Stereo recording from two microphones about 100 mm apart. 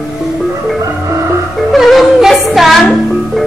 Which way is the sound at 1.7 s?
Centre (ahead or behind).